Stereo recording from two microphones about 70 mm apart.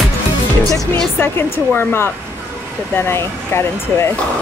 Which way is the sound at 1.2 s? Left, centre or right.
Left.